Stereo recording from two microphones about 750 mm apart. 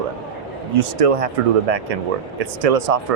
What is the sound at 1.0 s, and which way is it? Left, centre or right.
Speech, right.